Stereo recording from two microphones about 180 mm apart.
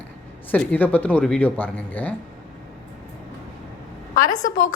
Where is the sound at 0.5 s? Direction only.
10° left (ahead or behind).